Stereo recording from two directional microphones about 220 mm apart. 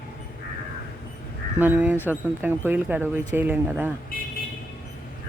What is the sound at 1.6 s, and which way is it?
Speech, 10° right (ahead or behind).